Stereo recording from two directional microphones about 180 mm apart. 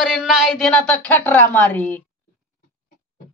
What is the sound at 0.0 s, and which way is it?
A woman's voice, 5° right (ahead or behind).